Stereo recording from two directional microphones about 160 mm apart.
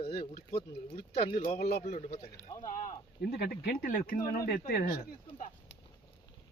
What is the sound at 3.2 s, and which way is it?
Speech, 75° left (ahead or behind).